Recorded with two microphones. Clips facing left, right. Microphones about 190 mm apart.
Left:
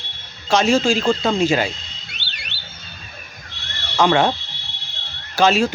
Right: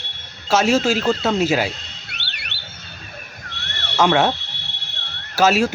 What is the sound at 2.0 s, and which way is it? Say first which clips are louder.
Alarm: right 1 dB; 65° right (ahead or behind).